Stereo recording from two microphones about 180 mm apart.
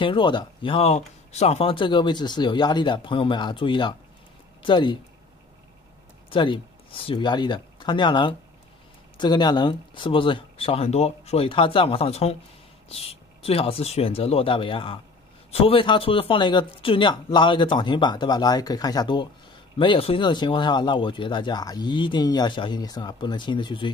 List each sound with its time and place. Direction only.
0.0 s speech: 25° left (ahead or behind)
6.3 s speech: 30° left (ahead or behind)